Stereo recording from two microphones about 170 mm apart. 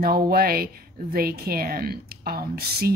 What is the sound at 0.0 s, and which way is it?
Speech, 65° right (ahead or behind).